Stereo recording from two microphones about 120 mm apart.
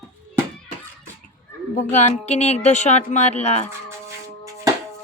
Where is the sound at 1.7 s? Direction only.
80° left.